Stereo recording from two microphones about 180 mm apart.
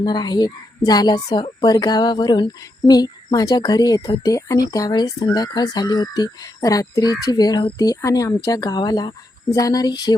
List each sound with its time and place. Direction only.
0.0 s a woman's voice: 25° left (ahead or behind)